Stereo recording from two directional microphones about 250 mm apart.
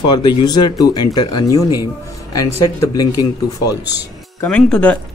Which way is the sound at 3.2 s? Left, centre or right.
Left.